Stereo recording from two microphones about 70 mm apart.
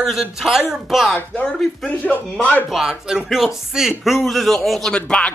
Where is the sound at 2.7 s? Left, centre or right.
Centre.